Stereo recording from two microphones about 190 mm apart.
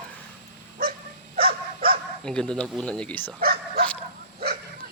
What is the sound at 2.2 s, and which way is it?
Speech, 5° left (ahead or behind).